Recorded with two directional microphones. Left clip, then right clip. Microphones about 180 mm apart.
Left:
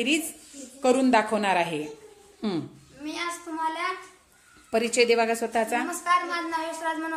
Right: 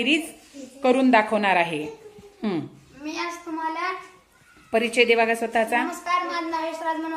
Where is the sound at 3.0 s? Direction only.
45° left (ahead or behind).